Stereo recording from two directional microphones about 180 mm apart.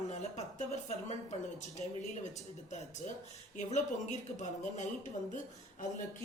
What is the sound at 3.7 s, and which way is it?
Speech, 40° left (ahead or behind).